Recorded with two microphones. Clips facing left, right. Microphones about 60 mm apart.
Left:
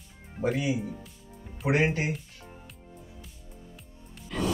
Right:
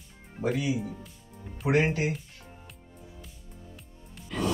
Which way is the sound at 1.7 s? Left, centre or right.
Left.